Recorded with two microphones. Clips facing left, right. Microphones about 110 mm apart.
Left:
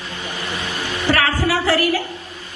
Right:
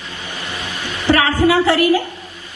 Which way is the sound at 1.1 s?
20° right (ahead or behind).